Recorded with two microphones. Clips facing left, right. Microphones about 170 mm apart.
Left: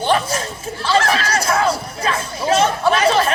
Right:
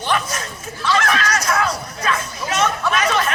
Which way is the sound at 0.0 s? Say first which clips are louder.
Left 4 dB; 30° left (ahead or behind).